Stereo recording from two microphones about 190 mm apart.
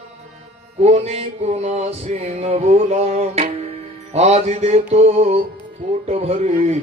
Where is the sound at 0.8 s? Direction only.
35° right (ahead or behind).